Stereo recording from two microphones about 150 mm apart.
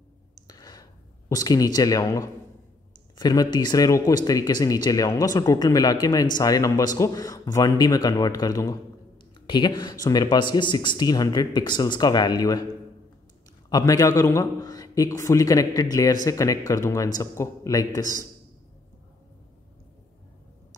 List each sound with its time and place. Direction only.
0.5 s a sound: 25° left (ahead or behind)
1.3 s a man's voice: 25° left (ahead or behind)
13.7 s a man's voice: 25° left (ahead or behind)